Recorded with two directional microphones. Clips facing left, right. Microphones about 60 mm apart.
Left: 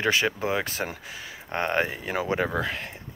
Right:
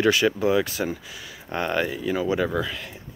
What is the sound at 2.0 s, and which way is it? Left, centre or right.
Speech, left.